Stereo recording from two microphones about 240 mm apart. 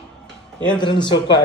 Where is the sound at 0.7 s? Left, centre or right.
Centre.